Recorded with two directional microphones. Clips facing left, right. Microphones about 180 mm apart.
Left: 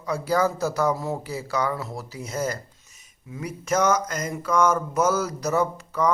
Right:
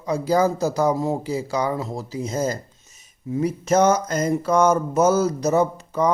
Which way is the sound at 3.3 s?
25° right (ahead or behind).